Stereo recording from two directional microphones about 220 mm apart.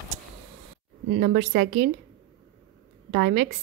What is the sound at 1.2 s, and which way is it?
Speech, 40° right (ahead or behind).